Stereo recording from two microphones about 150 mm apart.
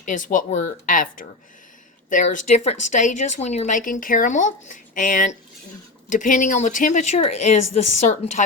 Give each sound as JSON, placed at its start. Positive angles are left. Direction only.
{"t": 0.1, "sound": "speech", "side_deg": 60}